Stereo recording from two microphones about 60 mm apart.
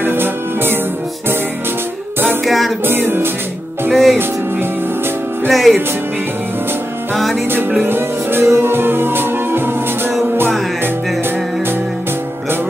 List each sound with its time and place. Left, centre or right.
0.0 s music: right
2.4 s music: centre
2.8 s music: right
3.9 s music: centre
5.5 s music: centre
7.8 s music: right